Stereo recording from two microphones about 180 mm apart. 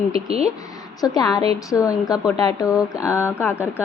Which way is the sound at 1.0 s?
20° left (ahead or behind).